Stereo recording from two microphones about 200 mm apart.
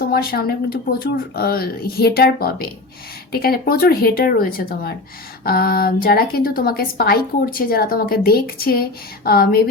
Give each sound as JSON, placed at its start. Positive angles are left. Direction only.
{"t": 0.0, "sound": "a woman's voice", "side_deg": 50}